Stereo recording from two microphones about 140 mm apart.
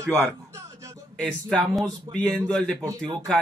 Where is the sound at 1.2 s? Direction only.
5° left (ahead or behind).